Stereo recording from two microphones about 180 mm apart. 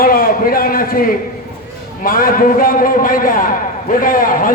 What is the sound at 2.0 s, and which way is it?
A man's voice, 50° left (ahead or behind).